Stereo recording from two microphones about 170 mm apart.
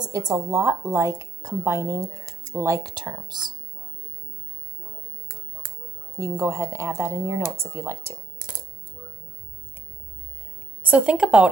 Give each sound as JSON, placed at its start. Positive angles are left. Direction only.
{"t": 0.0, "sound": "a woman's voice", "side_deg": -20}
{"t": 6.1, "sound": "a woman's voice", "side_deg": -15}
{"t": 10.8, "sound": "a woman's voice", "side_deg": -5}